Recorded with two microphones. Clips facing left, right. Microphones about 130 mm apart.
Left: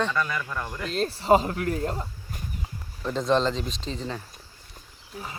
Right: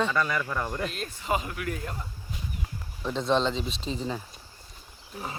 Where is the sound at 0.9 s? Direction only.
35° left (ahead or behind).